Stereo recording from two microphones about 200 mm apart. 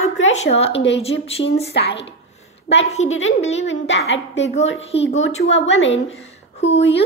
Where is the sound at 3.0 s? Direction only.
70° left (ahead or behind).